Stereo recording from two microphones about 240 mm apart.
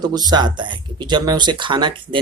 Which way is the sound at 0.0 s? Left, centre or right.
Centre.